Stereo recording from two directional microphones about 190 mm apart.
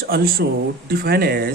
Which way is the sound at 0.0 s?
50° right (ahead or behind).